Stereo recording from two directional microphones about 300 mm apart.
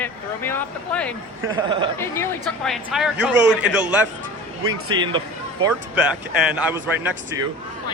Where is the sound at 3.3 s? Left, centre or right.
Right.